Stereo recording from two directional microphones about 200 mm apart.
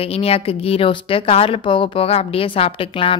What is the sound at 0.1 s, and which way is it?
Speech, 30° left (ahead or behind).